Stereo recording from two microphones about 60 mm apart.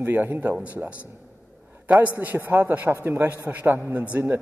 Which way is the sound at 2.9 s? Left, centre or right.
Right.